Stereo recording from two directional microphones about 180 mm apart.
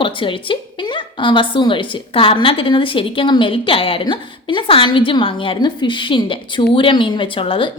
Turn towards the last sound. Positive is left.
turn(degrees=30)  # may be behind; listen again after turning